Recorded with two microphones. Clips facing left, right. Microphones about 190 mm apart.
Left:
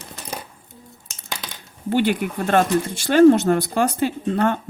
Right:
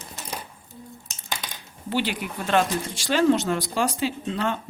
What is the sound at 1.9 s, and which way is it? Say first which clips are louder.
Speech: left 7 dB; 55° left (ahead or behind).